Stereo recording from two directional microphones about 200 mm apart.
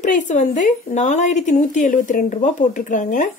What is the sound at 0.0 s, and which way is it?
A woman's voice, 40° left (ahead or behind).